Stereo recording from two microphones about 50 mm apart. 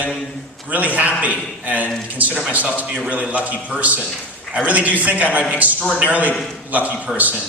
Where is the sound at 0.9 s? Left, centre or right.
Right.